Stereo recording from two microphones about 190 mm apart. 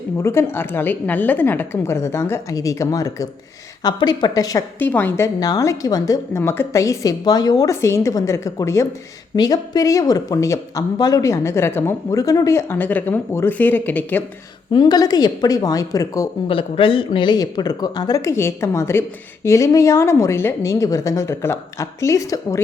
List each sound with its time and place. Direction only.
0.2 s a woman's voice: 15° left (ahead or behind)
14.7 s speech: 20° left (ahead or behind)
16.5 s a woman's voice: 30° left (ahead or behind)